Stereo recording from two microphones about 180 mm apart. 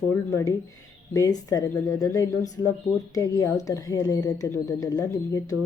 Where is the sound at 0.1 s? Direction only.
15° left (ahead or behind).